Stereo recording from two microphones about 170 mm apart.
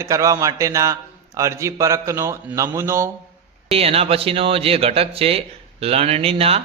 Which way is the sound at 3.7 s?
35° right (ahead or behind).